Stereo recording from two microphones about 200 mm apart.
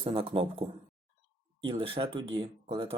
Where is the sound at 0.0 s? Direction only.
25° right (ahead or behind).